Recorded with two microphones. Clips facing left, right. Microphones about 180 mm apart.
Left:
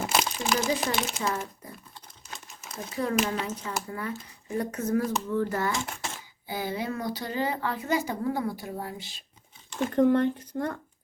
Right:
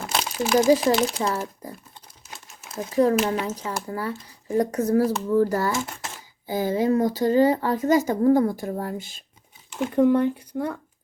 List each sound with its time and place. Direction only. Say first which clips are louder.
0.1 s crumpling: right 2 dB; centre (ahead or behind)
0.9 s speech: right 8 dB; centre (ahead or behind)
1.2 s speech: right 5 dB; 35° right (ahead or behind)
2.7 s speech: right 8 dB; 40° right (ahead or behind)
5.7 s speech: right 4 dB; centre (ahead or behind)
6.5 s speech: right 10 dB; 40° right (ahead or behind)
9.6 s speech: right 3 dB; 5° right (ahead or behind)